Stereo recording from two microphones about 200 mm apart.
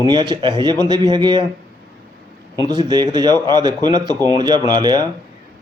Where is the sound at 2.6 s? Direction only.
20° right (ahead or behind).